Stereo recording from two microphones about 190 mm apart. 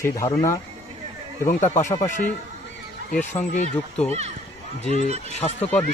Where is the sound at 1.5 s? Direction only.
40° left (ahead or behind).